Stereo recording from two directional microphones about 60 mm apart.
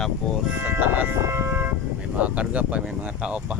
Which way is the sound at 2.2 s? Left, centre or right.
Right.